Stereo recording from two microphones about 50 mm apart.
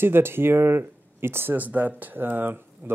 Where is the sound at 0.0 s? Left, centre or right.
Right.